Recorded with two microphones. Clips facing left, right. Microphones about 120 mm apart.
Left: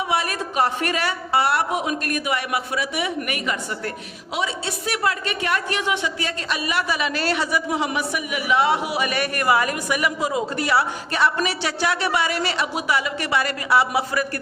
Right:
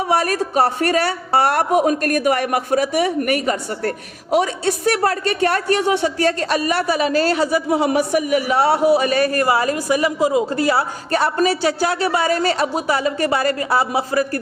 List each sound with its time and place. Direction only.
0.1 s a woman's voice: 40° right (ahead or behind)
11.1 s a woman's voice: 45° right (ahead or behind)